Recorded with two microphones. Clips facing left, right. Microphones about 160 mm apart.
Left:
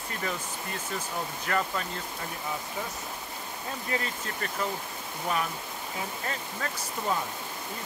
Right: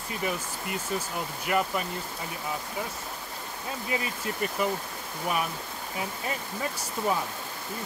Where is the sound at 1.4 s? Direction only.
15° right (ahead or behind).